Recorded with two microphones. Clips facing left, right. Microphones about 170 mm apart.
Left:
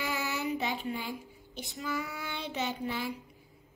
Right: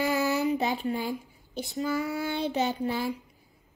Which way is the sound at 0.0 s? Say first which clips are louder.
Right 8 dB; 40° right (ahead or behind).